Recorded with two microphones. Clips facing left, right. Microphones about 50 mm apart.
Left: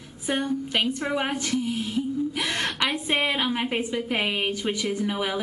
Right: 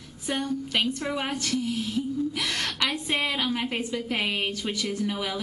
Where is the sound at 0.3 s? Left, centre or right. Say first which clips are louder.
Left 2 dB; centre.